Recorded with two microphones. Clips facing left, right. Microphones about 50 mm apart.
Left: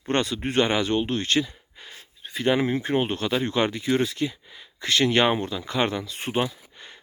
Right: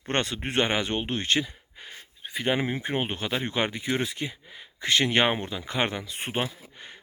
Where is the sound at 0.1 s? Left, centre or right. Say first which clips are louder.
Left 3 dB; right.